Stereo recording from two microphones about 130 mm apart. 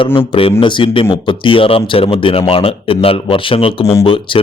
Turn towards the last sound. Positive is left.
turn(degrees=45)  # may be behind; listen again after turning